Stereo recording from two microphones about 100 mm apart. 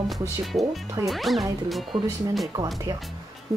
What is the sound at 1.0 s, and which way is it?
Speech, centre (ahead or behind).